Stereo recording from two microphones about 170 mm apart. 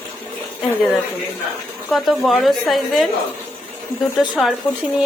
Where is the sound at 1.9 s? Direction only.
Centre (ahead or behind).